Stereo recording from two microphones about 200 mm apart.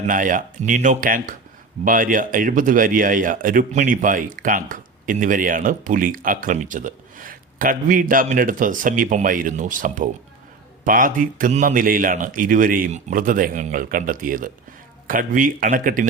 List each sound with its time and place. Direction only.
0.1 s speech: 40° right (ahead or behind)